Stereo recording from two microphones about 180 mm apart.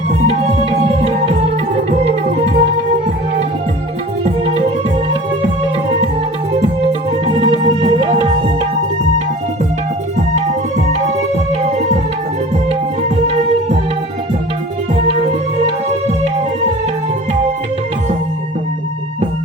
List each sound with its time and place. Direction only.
0.9 s music: 35° right (ahead or behind)
7.3 s music: 30° right (ahead or behind)
15.6 s music: 35° right (ahead or behind)